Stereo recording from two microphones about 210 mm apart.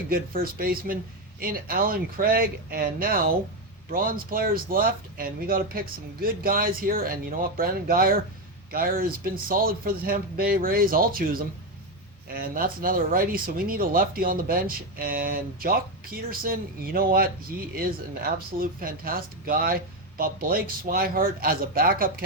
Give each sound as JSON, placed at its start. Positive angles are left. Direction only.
{"t": 0.1, "sound": "speech", "side_deg": -45}